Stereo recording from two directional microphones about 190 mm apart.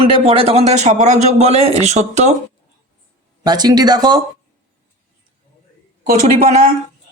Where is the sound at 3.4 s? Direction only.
20° right (ahead or behind).